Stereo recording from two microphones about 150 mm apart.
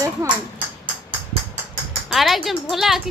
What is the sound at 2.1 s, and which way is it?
Speech, centre (ahead or behind).